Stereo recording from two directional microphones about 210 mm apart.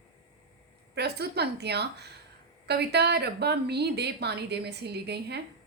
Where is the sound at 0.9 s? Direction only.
50° right (ahead or behind).